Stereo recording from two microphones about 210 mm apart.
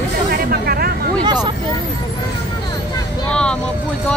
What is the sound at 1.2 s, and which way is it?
Vehicle, 20° right (ahead or behind).